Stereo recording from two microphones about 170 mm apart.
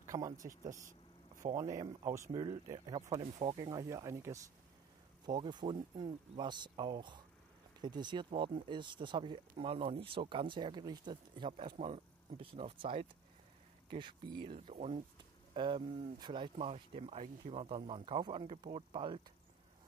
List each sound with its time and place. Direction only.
0.0 s a sound: 20° right (ahead or behind)
1.5 s speech: 20° right (ahead or behind)
3.2 s speech: 35° right (ahead or behind)
3.5 s speech: 20° right (ahead or behind); by 15.0 s 40° right (ahead or behind)
15.5 s speech: 25° right (ahead or behind)